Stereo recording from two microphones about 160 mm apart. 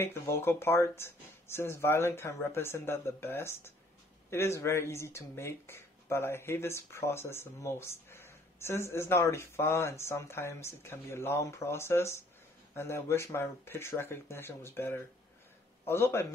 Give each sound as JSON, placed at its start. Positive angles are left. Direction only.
{"t": 0.0, "sound": "speech", "side_deg": 15}